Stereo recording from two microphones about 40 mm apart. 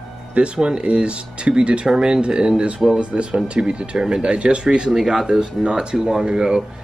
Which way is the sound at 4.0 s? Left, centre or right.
Centre.